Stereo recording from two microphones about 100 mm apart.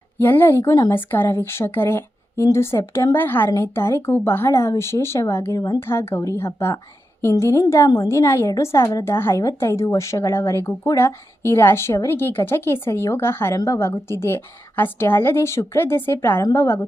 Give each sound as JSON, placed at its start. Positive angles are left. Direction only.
{"t": 0.2, "sound": "a woman's voice", "side_deg": 20}
{"t": 0.7, "sound": "speech", "side_deg": 35}
{"t": 0.9, "sound": "a woman's voice", "side_deg": 20}
{"t": 5.8, "sound": "a woman's voice", "side_deg": 25}